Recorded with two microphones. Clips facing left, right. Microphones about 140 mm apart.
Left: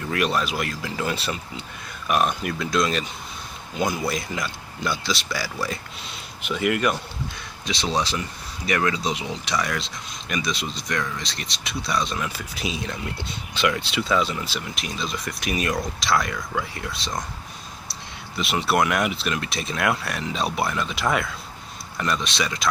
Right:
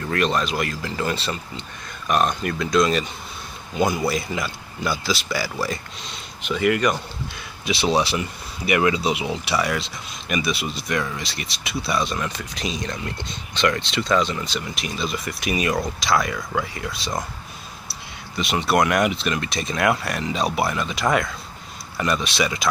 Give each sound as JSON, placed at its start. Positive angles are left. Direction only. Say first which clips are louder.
{"t": 0.0, "sound": "speech", "louder": "right 2 dB", "side_deg": 5}
{"t": 7.6, "sound": "speech", "louder": "right 5 dB", "side_deg": -10}